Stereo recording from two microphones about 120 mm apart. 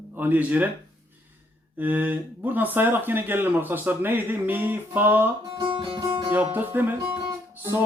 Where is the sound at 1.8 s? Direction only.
15° right (ahead or behind).